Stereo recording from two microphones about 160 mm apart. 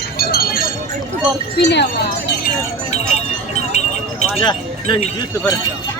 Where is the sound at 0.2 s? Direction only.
70° left (ahead or behind).